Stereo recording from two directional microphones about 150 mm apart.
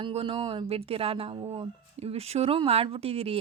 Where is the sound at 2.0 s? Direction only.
45° right (ahead or behind).